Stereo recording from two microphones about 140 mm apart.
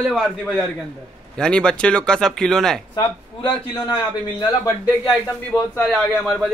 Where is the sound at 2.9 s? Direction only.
35° left (ahead or behind).